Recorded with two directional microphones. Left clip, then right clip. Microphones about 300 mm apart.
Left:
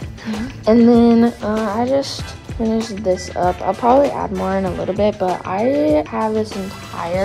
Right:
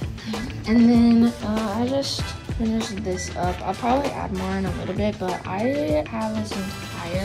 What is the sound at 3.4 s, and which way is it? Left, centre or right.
Speech, left.